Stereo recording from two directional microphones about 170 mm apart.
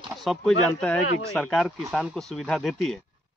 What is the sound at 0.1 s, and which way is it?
Speech, centre (ahead or behind).